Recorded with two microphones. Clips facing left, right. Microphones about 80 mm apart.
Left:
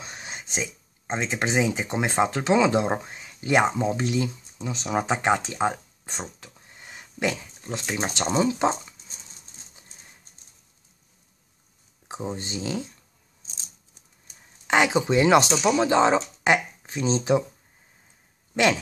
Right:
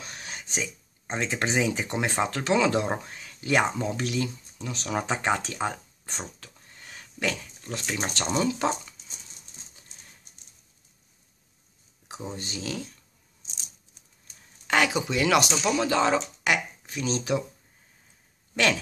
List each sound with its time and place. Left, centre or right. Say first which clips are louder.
0.0 s speech: left 2 dB; left
6.4 s a sound: left 2 dB; centre
8.4 s speech: left 3 dB; left
12.1 s speech: left 5 dB; left
14.7 s speech: left 4 dB; left
15.5 s speech: left 4 dB; centre
18.5 s speech: left 3 dB; centre